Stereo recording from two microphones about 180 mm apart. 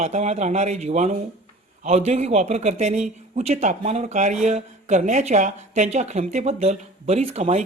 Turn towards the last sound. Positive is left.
turn(degrees=-35)  # may be behind; listen again after turning